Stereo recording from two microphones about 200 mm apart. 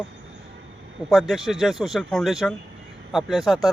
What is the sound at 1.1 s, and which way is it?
Speech, centre (ahead or behind).